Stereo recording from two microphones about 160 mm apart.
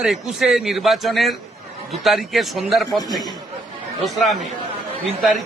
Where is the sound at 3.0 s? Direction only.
25° left (ahead or behind).